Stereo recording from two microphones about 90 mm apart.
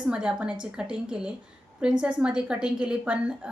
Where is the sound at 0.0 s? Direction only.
15° right (ahead or behind).